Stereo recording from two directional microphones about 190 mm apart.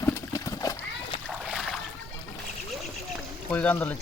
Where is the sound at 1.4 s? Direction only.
Centre (ahead or behind).